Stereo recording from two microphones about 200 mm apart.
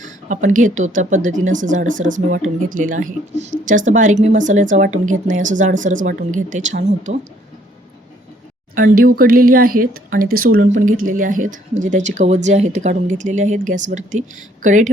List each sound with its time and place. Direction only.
0.0 s speech: 40° right (ahead or behind)
8.7 s speech: 45° right (ahead or behind)